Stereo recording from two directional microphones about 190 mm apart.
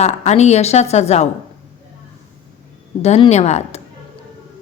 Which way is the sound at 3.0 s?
35° left (ahead or behind).